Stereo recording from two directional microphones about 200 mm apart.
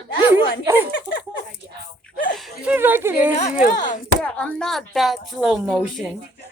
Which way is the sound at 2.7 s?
10° right (ahead or behind).